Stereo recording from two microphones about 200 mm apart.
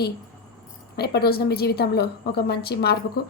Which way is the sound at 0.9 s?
55° left (ahead or behind).